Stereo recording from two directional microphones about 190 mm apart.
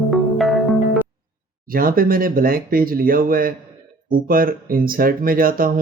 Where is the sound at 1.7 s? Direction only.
50° right (ahead or behind).